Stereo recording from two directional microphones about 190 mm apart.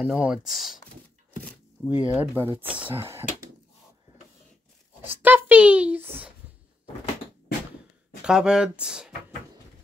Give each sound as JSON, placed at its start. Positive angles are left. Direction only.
{"t": 0.0, "sound": "speech", "side_deg": -5}
{"t": 1.9, "sound": "a child's voice", "side_deg": -10}
{"t": 5.0, "sound": "a child's voice", "side_deg": -10}
{"t": 8.2, "sound": "speech", "side_deg": -5}